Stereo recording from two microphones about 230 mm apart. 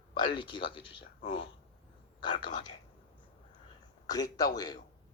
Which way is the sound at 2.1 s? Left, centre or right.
Centre.